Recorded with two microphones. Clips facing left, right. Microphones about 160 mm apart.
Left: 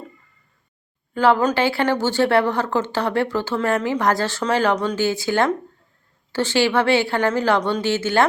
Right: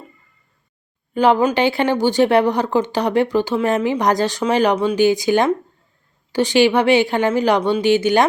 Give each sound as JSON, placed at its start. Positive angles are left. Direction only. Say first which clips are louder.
{"t": 1.1, "sound": "speech", "louder": "right 2 dB", "side_deg": -15}